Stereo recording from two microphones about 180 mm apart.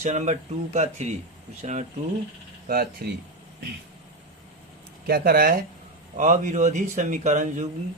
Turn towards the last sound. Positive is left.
turn(degrees=-40)  # may be behind; listen again after turning